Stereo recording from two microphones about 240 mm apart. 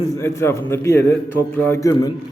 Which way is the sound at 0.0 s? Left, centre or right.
Centre.